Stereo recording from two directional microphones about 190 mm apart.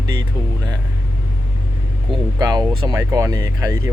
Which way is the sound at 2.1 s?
20° right (ahead or behind).